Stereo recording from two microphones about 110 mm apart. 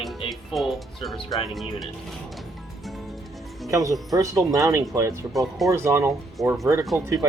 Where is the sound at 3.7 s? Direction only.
30° right (ahead or behind).